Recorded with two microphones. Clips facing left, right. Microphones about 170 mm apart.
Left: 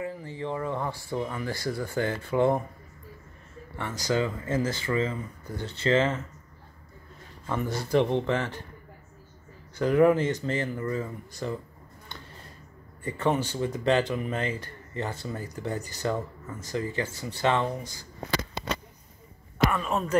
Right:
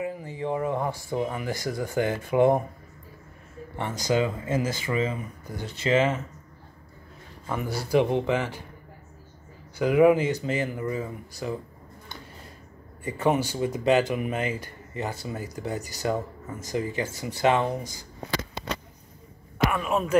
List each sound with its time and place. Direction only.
0.0 s speech: 15° right (ahead or behind)
4.0 s speech: 20° right (ahead or behind)
7.4 s speech: 10° right (ahead or behind)
9.8 s speech: 10° right (ahead or behind)
13.0 s speech: 10° right (ahead or behind)
19.7 s speech: 10° right (ahead or behind)